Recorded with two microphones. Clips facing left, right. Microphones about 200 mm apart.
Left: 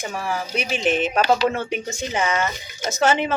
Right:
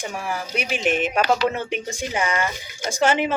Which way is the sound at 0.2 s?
10° right (ahead or behind).